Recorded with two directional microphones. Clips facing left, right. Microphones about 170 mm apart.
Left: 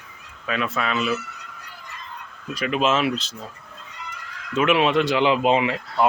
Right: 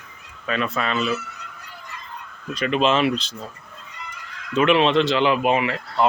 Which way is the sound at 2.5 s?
5° left (ahead or behind).